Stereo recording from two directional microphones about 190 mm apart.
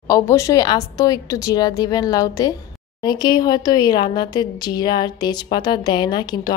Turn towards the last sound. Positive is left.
turn(degrees=20)  # may be behind; listen again after turning